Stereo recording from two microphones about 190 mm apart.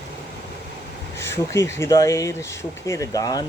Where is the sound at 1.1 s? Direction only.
15° left (ahead or behind).